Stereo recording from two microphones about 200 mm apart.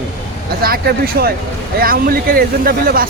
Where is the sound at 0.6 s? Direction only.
50° right (ahead or behind).